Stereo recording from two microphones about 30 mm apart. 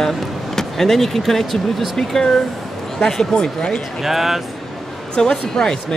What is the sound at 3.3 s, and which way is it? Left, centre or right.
Speech, left.